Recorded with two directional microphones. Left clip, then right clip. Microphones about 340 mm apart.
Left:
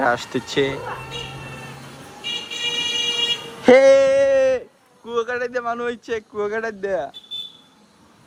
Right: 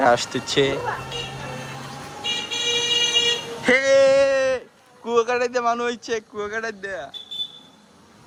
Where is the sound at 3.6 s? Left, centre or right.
Centre.